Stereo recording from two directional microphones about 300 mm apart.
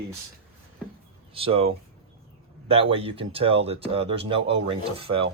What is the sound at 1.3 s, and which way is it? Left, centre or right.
Speech, centre.